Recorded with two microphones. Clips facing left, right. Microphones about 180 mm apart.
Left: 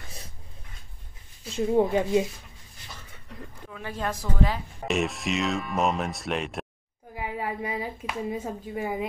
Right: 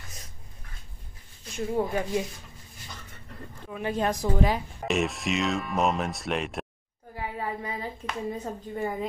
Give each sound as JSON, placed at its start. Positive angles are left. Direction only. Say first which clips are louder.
{"t": 1.5, "sound": "speech", "louder": "left 5 dB", "side_deg": 25}
{"t": 3.7, "sound": "a woman's voice", "louder": "right 5 dB", "side_deg": -20}
{"t": 4.8, "sound": "speech", "louder": "even", "side_deg": 0}
{"t": 7.2, "sound": "a woman's voice", "louder": "left 2 dB", "side_deg": 15}